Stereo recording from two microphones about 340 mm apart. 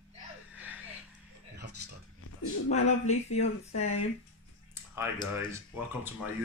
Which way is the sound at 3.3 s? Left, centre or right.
Centre.